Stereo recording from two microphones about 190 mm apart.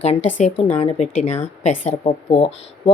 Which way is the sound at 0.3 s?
35° left (ahead or behind).